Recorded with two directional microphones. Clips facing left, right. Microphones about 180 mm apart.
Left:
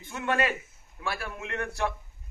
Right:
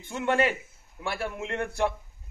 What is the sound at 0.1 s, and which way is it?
A man's voice, 25° right (ahead or behind).